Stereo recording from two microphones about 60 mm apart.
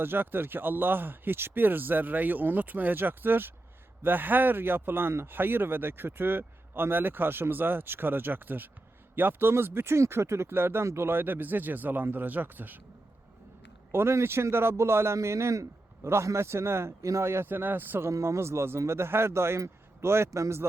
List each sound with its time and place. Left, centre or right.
0.0 s speech: right
13.9 s a man's voice: right
17.5 s speech: right
18.1 s a man's voice: right